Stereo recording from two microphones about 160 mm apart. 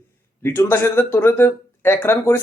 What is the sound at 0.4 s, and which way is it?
Speech, 15° left (ahead or behind).